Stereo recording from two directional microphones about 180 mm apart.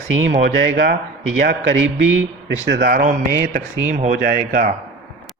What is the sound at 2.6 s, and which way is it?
Speech, 55° right (ahead or behind).